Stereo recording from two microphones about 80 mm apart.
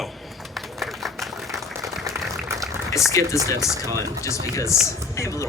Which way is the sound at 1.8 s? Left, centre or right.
Right.